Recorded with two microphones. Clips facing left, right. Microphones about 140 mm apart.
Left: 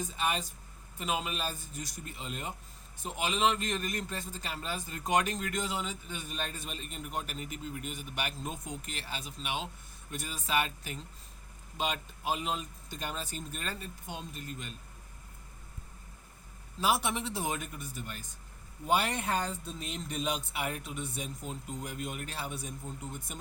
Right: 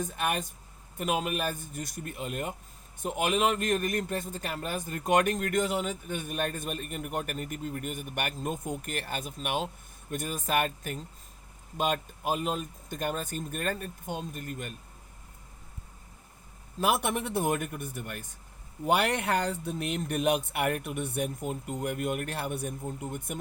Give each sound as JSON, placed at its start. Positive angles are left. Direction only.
{"t": 0.0, "sound": "a man's voice", "side_deg": -60}
{"t": 16.8, "sound": "a man's voice", "side_deg": -55}